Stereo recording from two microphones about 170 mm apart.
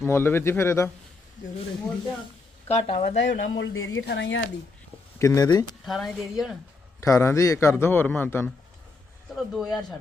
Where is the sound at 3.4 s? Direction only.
90° left.